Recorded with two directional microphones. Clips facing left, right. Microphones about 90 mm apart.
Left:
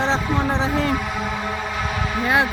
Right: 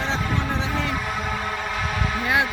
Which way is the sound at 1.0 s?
5° left (ahead or behind).